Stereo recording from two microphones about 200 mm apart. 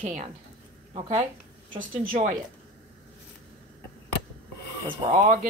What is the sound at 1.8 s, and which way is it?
Speech, 40° right (ahead or behind).